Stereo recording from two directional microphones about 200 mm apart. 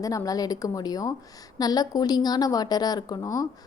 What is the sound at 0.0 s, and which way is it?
A woman's voice, 15° left (ahead or behind).